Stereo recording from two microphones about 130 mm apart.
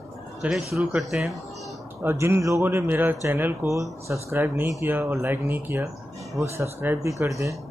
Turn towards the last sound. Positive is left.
turn(degrees=-25)  # may be behind; listen again after turning